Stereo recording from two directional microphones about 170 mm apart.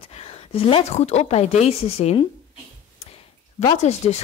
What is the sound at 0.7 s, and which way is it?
Speech, 35° left (ahead or behind).